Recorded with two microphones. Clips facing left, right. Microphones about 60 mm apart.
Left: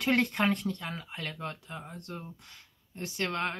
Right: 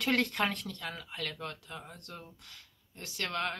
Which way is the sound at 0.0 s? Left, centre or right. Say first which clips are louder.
Left 3 dB; left.